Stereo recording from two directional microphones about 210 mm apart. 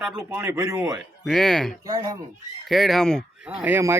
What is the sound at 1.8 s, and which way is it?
Speech, 20° right (ahead or behind).